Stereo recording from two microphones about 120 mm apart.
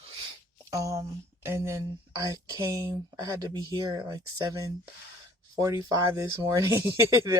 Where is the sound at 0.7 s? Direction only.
25° right (ahead or behind).